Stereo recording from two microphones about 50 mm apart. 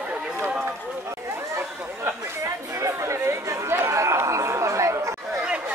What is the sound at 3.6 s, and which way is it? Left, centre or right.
Chatter, right.